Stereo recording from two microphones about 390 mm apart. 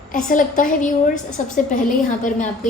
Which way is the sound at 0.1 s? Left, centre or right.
Centre.